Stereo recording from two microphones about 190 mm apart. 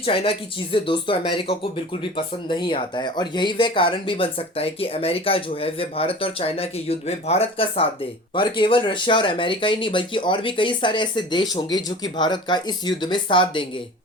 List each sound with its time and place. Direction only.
0.0 s speech: 30° left (ahead or behind)